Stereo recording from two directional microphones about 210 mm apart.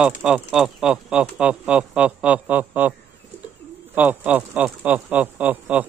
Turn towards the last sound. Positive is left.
turn(degrees=-10)  # may be behind; listen again after turning